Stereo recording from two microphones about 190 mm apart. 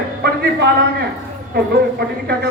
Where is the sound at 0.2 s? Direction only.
55° right (ahead or behind).